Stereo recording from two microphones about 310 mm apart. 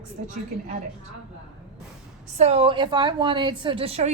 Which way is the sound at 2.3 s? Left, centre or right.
Centre.